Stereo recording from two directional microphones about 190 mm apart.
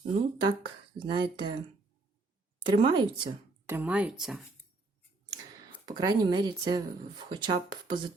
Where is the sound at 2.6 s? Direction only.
25° right (ahead or behind).